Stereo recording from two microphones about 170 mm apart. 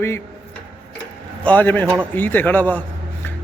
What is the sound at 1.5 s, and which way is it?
Speech, 10° left (ahead or behind).